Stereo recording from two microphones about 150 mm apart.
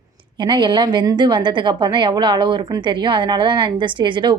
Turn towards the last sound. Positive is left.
turn(degrees=-30)  # may be behind; listen again after turning